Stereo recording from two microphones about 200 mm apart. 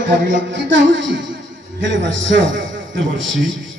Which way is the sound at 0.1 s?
65° right (ahead or behind).